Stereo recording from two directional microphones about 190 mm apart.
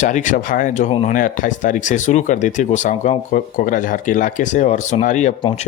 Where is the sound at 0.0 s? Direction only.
40° left (ahead or behind).